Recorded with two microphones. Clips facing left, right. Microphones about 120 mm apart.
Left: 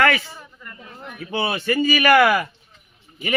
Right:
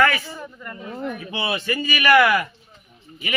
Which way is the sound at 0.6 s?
60° right (ahead or behind).